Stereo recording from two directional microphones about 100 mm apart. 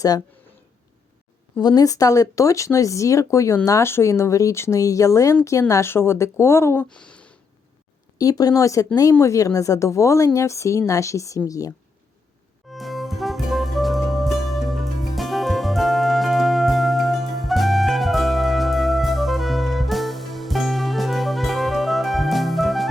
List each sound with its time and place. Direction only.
1.5 s speech: 40° left (ahead or behind)
6.9 s a sound: 10° left (ahead or behind)
8.2 s speech: 40° left (ahead or behind)
12.7 s music: centre (ahead or behind)